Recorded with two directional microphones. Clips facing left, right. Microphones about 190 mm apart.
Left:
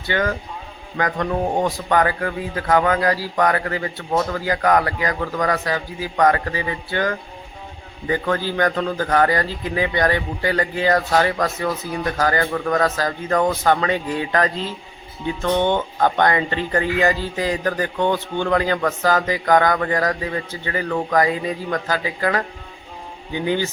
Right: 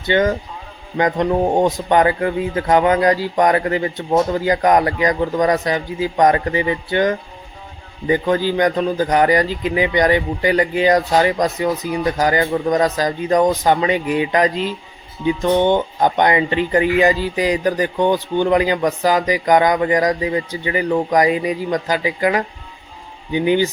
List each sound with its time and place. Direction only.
0.0 s speech: 20° right (ahead or behind)